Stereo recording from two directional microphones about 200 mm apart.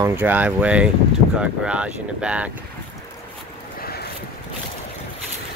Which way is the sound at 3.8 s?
50° left (ahead or behind).